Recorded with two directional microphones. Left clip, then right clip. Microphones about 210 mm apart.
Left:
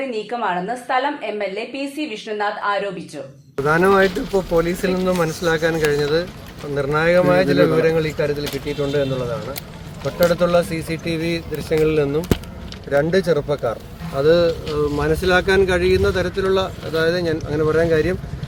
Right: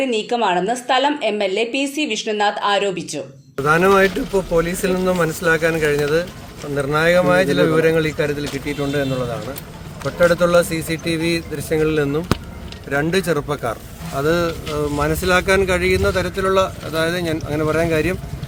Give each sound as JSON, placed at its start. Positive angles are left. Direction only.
{"t": 0.3, "sound": "a woman's voice", "side_deg": -50}
{"t": 3.6, "sound": "speech", "side_deg": -10}
{"t": 10.2, "sound": "speech", "side_deg": -5}